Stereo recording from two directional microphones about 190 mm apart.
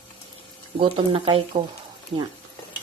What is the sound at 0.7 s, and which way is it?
Speech, 25° right (ahead or behind).